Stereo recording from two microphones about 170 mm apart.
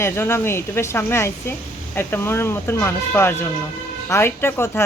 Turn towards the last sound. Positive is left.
turn(degrees=15)  # may be behind; listen again after turning